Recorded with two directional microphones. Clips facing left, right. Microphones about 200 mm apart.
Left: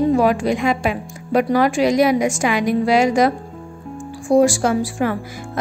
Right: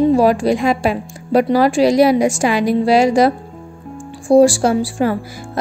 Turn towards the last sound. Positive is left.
turn(degrees=-30)  # may be behind; listen again after turning